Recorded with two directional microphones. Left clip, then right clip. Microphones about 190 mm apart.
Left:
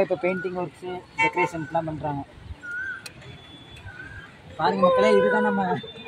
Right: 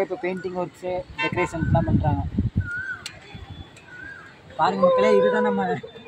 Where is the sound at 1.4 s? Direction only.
Centre (ahead or behind).